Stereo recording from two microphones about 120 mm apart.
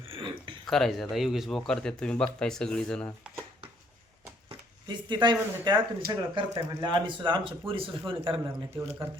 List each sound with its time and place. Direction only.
0.1 s a sound: 45° right (ahead or behind)
0.7 s speech: centre (ahead or behind)
4.4 s speech: 40° right (ahead or behind)